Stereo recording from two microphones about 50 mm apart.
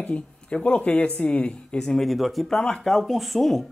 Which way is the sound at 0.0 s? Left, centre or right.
Left.